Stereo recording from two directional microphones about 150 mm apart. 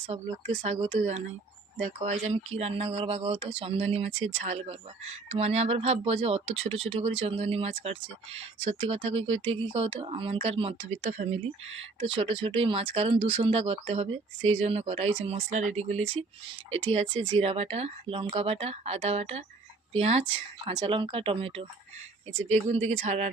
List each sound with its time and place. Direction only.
0.1 s speech: 45° right (ahead or behind)
11.4 s speech: 40° right (ahead or behind)